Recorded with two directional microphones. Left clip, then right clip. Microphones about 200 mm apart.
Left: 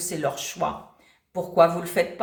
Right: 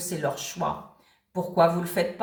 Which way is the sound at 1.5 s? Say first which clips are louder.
Left 3 dB; 40° left (ahead or behind).